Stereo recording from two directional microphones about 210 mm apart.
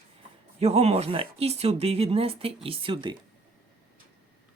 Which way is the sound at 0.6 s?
30° right (ahead or behind).